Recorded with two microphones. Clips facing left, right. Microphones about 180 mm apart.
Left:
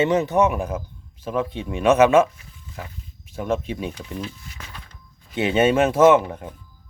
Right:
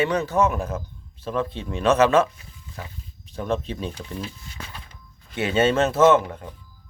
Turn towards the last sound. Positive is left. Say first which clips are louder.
# left 2 dB
turn(degrees=20)  # may be behind; listen again after turning